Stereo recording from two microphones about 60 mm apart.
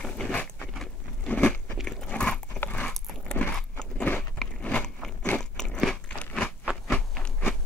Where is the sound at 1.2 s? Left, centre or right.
Left.